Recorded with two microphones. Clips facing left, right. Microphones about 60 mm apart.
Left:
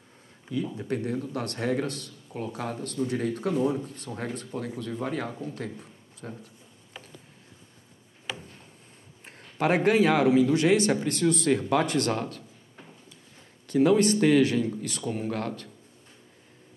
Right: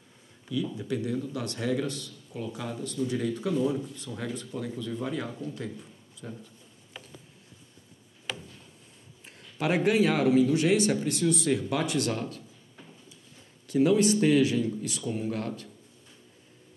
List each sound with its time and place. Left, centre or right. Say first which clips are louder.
0.5 s a man's voice: left 1 dB; left
8.3 s a sound: left 1 dB; centre
9.2 s a man's voice: left 4 dB; left
13.7 s a man's voice: left 2 dB; left